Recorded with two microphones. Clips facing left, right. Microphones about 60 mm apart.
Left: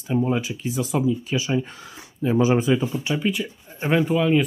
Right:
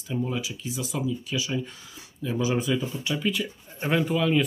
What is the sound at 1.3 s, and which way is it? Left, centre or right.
Speech, left.